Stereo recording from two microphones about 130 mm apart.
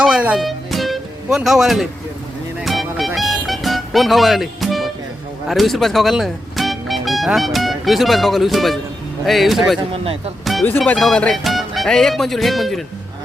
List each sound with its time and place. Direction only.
0.0 s music: 10° right (ahead or behind)
1.4 s speech: 5° right (ahead or behind)
2.6 s music: centre (ahead or behind)
5.5 s speech: centre (ahead or behind)
9.9 s speech: 45° right (ahead or behind)
10.4 s music: centre (ahead or behind)
10.8 s speech: 5° left (ahead or behind)